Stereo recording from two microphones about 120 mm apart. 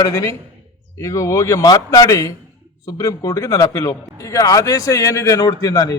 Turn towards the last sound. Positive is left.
turn(degrees=30)  # may be behind; listen again after turning